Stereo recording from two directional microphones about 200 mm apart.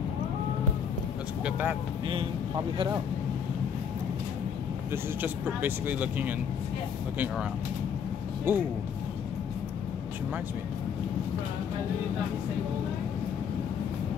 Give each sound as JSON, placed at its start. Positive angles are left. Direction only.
{"t": 1.4, "sound": "speech", "side_deg": -10}
{"t": 2.0, "sound": "speech", "side_deg": -25}
{"t": 4.9, "sound": "speech", "side_deg": -10}
{"t": 8.5, "sound": "speech", "side_deg": -10}